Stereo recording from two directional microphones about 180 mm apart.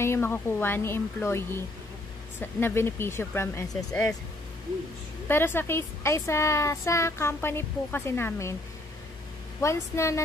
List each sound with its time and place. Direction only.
0.0 s a woman's voice: 15° left (ahead or behind)
5.3 s a woman's voice: 10° left (ahead or behind)
9.6 s a woman's voice: 15° left (ahead or behind)